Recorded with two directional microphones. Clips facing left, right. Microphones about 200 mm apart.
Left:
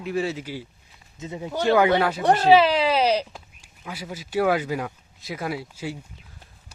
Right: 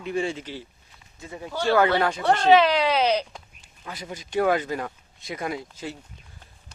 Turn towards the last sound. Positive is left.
turn(degrees=10)  # may be behind; listen again after turning